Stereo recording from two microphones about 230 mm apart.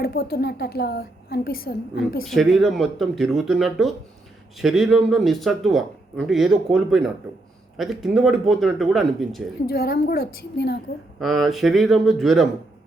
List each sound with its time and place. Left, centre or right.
0.0 s a woman's voice: left
2.2 s speech: centre
9.6 s a woman's voice: left
11.2 s speech: centre